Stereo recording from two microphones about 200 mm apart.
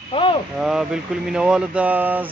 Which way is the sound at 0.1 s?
25° left (ahead or behind).